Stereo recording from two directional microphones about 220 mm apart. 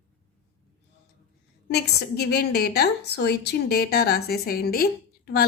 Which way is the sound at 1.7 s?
50° left (ahead or behind).